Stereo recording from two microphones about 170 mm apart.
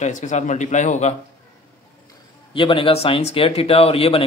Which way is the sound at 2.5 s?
30° left (ahead or behind).